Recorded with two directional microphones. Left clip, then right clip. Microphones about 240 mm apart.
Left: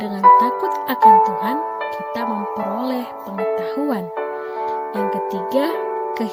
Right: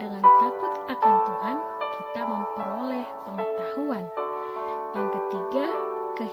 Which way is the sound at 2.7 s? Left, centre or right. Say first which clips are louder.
Left 7 dB; left.